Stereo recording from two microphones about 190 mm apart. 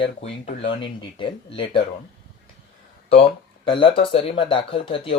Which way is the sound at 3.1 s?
30° left (ahead or behind).